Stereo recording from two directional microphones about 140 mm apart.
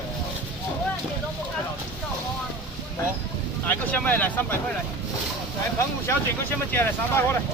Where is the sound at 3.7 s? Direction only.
10° left (ahead or behind).